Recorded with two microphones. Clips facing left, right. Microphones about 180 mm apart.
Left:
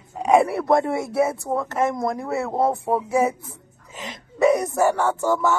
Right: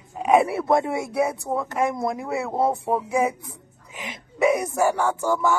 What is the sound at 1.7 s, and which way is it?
Speech, 15° right (ahead or behind).